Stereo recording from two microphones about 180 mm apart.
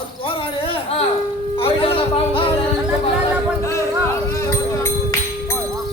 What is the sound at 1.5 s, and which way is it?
Music, 30° left (ahead or behind).